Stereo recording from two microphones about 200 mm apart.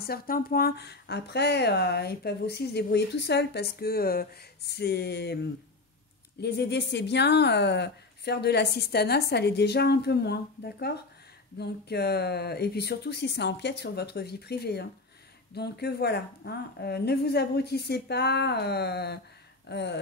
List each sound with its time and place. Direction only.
0.0 s speech: 50° left (ahead or behind)